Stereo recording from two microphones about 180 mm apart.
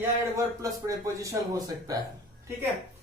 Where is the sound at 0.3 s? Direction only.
20° right (ahead or behind).